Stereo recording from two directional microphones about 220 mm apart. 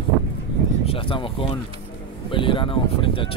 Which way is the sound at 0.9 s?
25° left (ahead or behind).